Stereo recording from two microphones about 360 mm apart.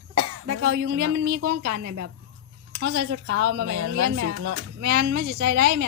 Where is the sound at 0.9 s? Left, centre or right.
Right.